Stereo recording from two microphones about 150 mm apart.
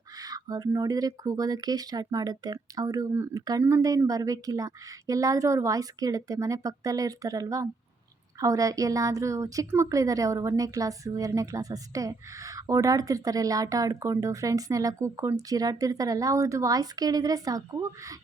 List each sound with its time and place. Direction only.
0.2 s a woman's voice: 25° right (ahead or behind)